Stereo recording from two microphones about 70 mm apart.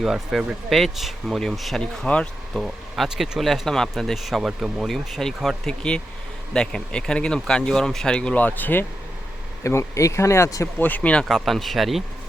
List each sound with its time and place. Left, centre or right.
0.0 s speech: centre
2.0 s speech: centre
2.6 s speech: centre
8.4 s speech: left
9.6 s speech: left
10.8 s speech: left
11.3 s speech: centre